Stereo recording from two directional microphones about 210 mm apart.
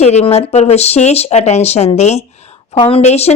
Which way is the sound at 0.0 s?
30° left (ahead or behind).